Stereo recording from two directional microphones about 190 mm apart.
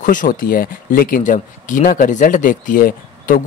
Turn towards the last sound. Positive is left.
turn(degrees=45)  # may be behind; listen again after turning